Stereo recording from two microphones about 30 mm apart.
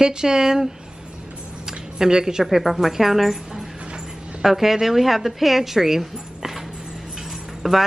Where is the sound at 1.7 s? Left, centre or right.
Right.